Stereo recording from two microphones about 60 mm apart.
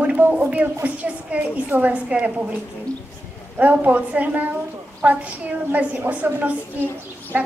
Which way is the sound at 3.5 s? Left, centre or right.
Right.